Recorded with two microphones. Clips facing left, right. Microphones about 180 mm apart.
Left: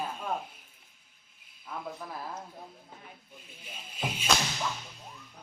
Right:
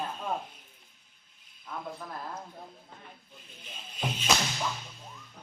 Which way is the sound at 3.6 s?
10° left (ahead or behind).